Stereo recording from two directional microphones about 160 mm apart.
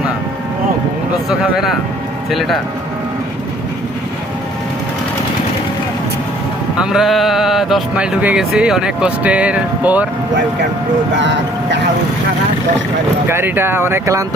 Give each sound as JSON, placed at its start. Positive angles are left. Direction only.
{"t": 1.3, "sound": "speech", "side_deg": 0}
{"t": 6.7, "sound": "speech", "side_deg": 0}
{"t": 11.2, "sound": "speech", "side_deg": -90}
{"t": 13.2, "sound": "speech", "side_deg": -15}